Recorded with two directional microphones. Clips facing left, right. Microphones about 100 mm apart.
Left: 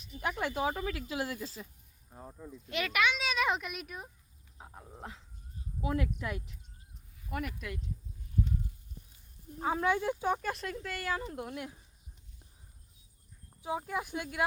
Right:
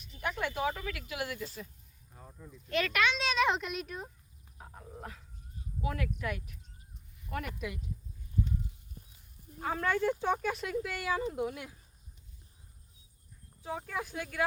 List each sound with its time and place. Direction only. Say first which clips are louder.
0.2 s speech: left 1 dB; 25° left (ahead or behind)
2.6 s speech: right 1 dB; 10° left (ahead or behind)
5.8 s speech: left 2 dB; 25° left (ahead or behind)
7.3 s speech: even; 5° left (ahead or behind)
9.6 s speech: even; 15° left (ahead or behind)
13.6 s speech: left 2 dB; 15° left (ahead or behind)